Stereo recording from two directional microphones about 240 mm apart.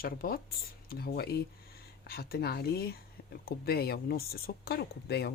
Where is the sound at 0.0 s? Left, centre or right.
Left.